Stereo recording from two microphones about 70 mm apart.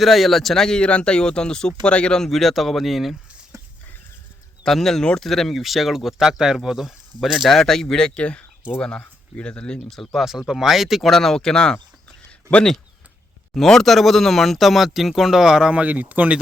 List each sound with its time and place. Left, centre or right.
0.0 s speech: centre
4.6 s speech: centre
9.9 s speech: centre
13.5 s speech: centre; by 16.4 s right